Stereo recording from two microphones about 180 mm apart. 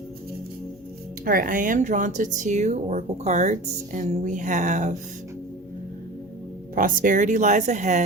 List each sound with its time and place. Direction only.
1.2 s speech: 50° right (ahead or behind)
6.7 s speech: 50° right (ahead or behind)